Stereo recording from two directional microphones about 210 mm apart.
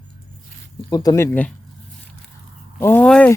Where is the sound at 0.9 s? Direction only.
15° left (ahead or behind).